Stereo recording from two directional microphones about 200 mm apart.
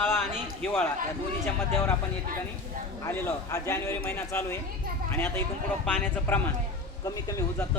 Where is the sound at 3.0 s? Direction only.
10° left (ahead or behind).